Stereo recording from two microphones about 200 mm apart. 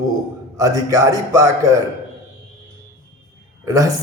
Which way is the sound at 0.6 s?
15° right (ahead or behind).